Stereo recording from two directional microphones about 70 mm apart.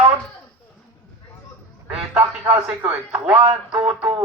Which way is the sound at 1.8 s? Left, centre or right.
Centre.